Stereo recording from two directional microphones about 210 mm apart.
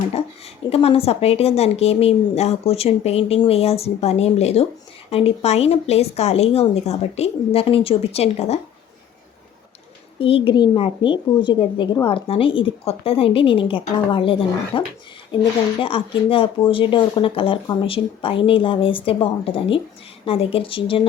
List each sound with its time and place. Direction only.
0.7 s speech: 30° left (ahead or behind)
10.2 s speech: 25° left (ahead or behind)